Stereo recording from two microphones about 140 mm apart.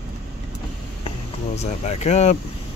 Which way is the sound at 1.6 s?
50° left (ahead or behind).